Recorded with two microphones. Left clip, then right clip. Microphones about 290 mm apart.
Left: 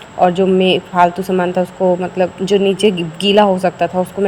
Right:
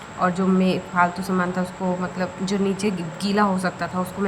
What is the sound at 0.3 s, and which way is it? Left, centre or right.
Speech, centre.